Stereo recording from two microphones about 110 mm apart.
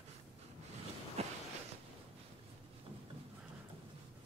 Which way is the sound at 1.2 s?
75° right (ahead or behind).